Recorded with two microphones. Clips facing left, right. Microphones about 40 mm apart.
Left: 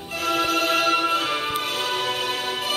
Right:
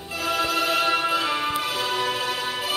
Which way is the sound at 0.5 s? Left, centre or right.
Centre.